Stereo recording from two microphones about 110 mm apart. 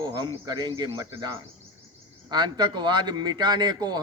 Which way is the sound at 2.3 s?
40° right (ahead or behind).